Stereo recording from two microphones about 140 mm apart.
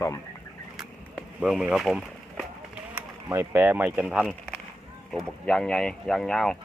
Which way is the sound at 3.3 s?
15° right (ahead or behind).